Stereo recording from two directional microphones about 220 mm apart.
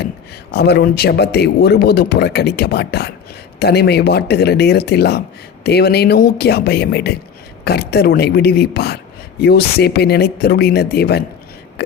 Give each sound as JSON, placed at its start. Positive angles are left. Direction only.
{"t": 0.5, "sound": "speech", "side_deg": 50}